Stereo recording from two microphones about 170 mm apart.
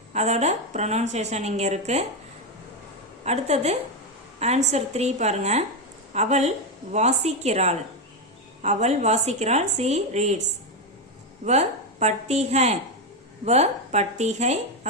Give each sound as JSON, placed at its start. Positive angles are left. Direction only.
{"t": 0.1, "sound": "a woman's voice", "side_deg": -40}
{"t": 3.2, "sound": "a woman's voice", "side_deg": -40}
{"t": 11.4, "sound": "a woman's voice", "side_deg": -40}